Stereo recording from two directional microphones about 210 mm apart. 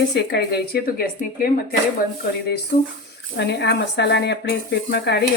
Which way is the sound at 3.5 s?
55° left (ahead or behind).